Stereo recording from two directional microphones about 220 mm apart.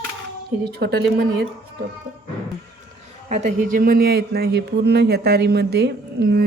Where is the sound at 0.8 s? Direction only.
50° right (ahead or behind).